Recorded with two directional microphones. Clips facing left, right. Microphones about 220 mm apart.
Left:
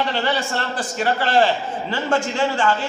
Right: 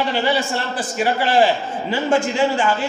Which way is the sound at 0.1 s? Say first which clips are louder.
Right 3 dB; 10° right (ahead or behind).